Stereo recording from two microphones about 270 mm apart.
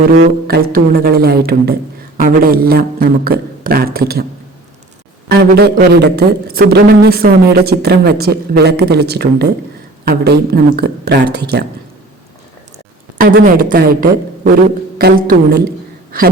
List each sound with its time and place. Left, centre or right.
0.2 s speech: right
5.3 s speech: right
13.1 s speech: right